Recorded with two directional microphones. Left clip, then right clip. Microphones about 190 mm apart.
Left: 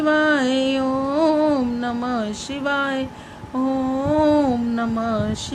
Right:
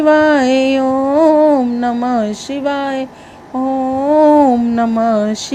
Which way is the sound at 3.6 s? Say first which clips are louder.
Right 7 dB; 25° right (ahead or behind).